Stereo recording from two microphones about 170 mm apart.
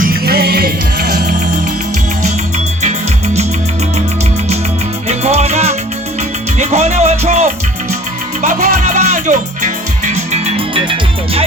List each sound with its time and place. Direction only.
0.0 s music: 65° right (ahead or behind)
5.0 s music: 40° right (ahead or behind)